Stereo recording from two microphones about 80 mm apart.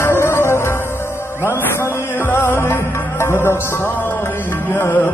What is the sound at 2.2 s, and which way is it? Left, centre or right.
Music, left.